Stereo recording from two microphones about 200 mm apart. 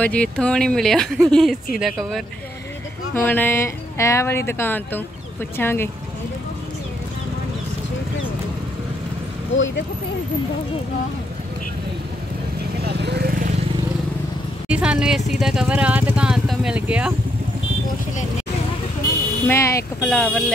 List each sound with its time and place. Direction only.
0.0 s speech: 5° left (ahead or behind)
3.2 s speech: 10° left (ahead or behind)
9.5 s speech: 70° left (ahead or behind)
12.8 s vehicle: 55° right (ahead or behind)
14.7 s speech: 5° right (ahead or behind)
19.4 s speech: 15° left (ahead or behind)